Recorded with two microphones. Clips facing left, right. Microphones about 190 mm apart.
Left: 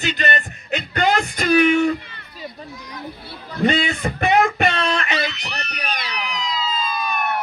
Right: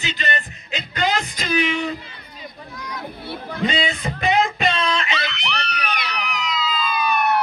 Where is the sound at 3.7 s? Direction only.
55° left (ahead or behind).